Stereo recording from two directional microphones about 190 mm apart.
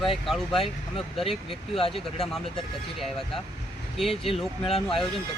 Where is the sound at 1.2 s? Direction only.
30° left (ahead or behind).